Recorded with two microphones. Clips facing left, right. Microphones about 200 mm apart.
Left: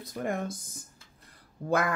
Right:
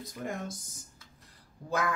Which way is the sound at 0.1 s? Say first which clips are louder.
Left 6 dB; 60° left (ahead or behind).